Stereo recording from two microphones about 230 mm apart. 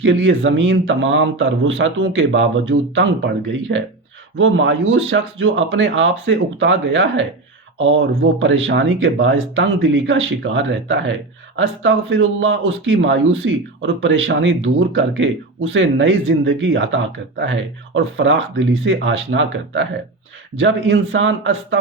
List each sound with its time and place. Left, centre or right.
0.0 s speech: right